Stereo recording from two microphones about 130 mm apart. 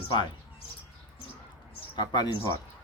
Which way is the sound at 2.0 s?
30° left (ahead or behind).